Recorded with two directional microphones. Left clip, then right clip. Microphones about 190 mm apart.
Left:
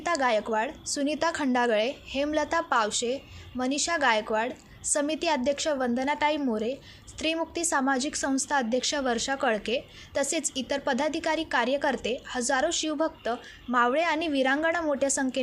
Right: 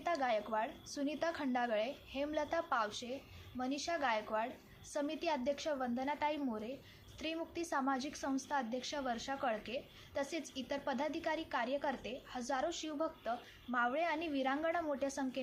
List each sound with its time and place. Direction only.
0.0 s a woman's voice: 45° left (ahead or behind)